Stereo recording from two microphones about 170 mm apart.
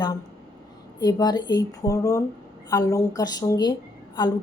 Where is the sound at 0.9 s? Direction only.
25° left (ahead or behind).